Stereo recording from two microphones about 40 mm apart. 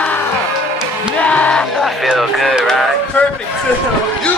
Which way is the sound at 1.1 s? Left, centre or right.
Left.